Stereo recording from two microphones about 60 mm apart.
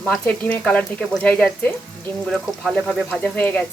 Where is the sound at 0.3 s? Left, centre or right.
Left.